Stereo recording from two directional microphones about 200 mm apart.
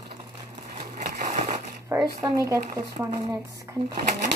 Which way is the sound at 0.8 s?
40° right (ahead or behind).